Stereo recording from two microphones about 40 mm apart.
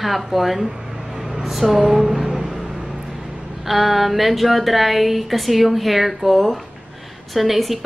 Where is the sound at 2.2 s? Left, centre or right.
Centre.